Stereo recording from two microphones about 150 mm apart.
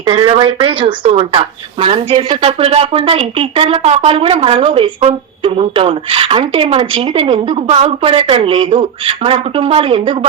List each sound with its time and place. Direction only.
0.0 s speech: 35° right (ahead or behind)